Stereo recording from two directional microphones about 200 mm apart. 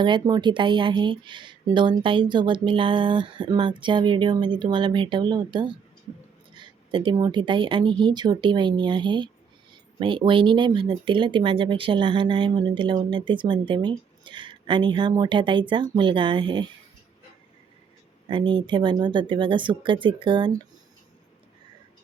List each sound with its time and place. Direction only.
0.0 s speech: 20° right (ahead or behind)
18.3 s speech: 25° right (ahead or behind)